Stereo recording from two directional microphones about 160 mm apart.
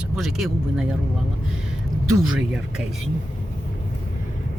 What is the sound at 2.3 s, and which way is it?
Speech, 5° right (ahead or behind).